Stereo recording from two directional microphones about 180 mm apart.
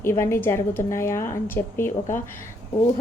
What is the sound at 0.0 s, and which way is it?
A woman's voice, 15° left (ahead or behind).